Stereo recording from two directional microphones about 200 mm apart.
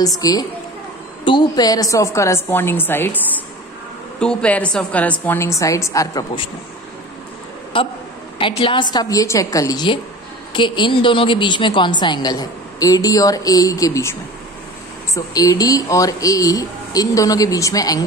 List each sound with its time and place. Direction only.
0.2 s a woman's voice: 20° left (ahead or behind)
4.2 s speech: 5° left (ahead or behind); by 6.5 s 20° left (ahead or behind)
7.7 s a woman's voice: 25° left (ahead or behind)
15.1 s speech: 20° left (ahead or behind)